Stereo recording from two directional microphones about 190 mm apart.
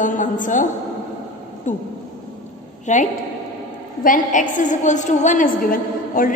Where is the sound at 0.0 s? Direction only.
40° left (ahead or behind).